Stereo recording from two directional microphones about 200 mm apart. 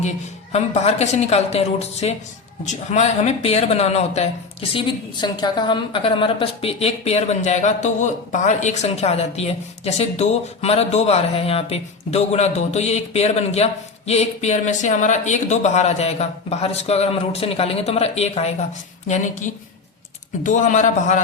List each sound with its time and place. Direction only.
0.5 s speech: 35° left (ahead or behind)